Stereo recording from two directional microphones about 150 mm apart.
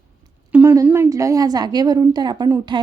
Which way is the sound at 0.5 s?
20° right (ahead or behind).